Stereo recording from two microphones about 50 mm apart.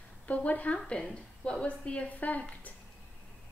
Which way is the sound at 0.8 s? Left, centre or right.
Centre.